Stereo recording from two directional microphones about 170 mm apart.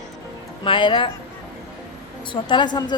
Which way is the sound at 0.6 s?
30° left (ahead or behind).